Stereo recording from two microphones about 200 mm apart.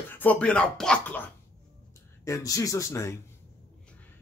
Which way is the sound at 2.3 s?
15° left (ahead or behind).